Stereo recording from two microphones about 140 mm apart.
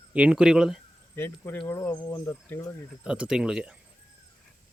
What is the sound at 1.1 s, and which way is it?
Speech, 15° left (ahead or behind).